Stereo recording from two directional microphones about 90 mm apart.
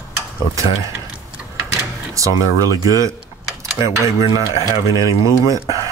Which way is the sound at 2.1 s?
40° right (ahead or behind).